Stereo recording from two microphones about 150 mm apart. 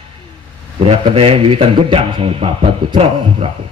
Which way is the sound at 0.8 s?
40° right (ahead or behind).